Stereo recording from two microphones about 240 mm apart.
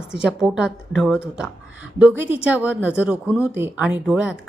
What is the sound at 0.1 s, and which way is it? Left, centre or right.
A woman's voice, centre.